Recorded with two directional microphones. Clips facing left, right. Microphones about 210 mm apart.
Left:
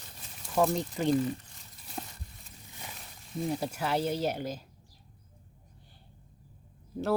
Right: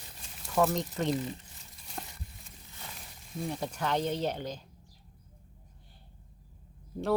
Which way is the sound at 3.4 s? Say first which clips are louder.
Left 1 dB; 5° left (ahead or behind).